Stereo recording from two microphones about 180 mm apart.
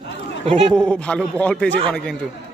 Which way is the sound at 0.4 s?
35° right (ahead or behind).